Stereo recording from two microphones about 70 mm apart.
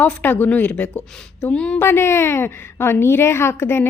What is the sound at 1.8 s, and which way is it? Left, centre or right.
A woman's voice, left.